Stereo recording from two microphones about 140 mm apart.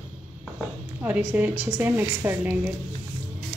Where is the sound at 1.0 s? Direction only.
10° right (ahead or behind).